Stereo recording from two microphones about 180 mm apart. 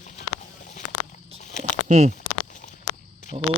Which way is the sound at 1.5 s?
40° left (ahead or behind).